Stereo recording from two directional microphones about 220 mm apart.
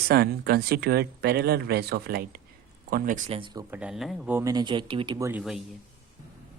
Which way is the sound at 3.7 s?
5° right (ahead or behind).